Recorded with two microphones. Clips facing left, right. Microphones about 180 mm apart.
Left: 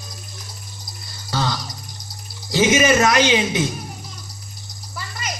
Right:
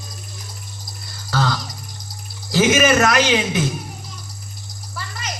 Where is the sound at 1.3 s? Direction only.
20° left (ahead or behind).